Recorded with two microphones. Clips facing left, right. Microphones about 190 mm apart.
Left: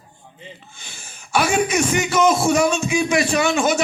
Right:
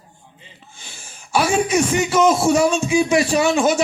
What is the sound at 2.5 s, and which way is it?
A man's voice, 30° right (ahead or behind).